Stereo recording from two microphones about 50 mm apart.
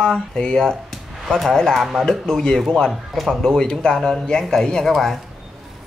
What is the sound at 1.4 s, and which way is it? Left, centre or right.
Speech, centre.